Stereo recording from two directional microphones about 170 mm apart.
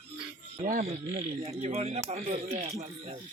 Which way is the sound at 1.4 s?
40° right (ahead or behind).